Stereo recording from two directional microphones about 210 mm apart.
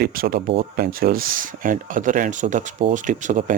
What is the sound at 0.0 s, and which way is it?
Speech, 45° right (ahead or behind).